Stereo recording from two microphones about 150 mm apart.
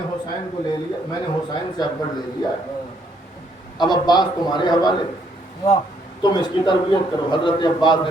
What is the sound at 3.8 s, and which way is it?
A man's voice, 30° left (ahead or behind).